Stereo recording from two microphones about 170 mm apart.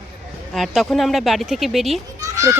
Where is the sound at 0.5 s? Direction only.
Centre (ahead or behind).